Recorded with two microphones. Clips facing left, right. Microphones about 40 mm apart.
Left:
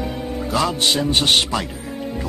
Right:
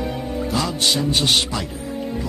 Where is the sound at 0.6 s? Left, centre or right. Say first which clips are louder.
Left 4 dB; left.